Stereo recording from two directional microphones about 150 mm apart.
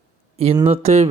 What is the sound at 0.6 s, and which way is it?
Speech, 45° right (ahead or behind).